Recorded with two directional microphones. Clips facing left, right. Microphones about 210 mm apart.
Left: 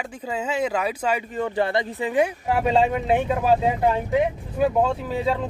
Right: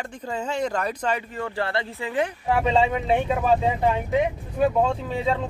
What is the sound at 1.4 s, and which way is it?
Speech, 15° left (ahead or behind).